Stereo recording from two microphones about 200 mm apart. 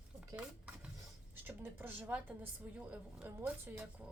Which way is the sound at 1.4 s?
10° right (ahead or behind).